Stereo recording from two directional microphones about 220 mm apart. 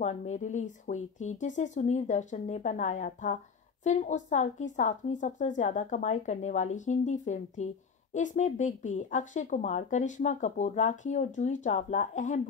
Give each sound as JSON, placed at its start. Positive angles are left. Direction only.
{"t": 0.0, "sound": "speech", "side_deg": 30}